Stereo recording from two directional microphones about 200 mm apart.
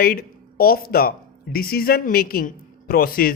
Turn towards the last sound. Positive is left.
turn(degrees=45)  # may be behind; listen again after turning